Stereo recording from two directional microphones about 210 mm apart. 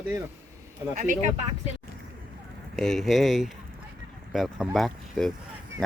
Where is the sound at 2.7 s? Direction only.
Centre (ahead or behind).